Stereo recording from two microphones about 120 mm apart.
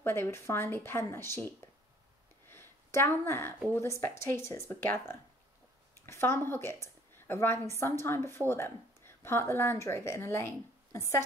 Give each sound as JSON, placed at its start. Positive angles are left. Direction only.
{"t": 0.0, "sound": "speech", "side_deg": 20}
{"t": 2.5, "sound": "a sound", "side_deg": 20}
{"t": 3.7, "sound": "a woman's voice", "side_deg": 20}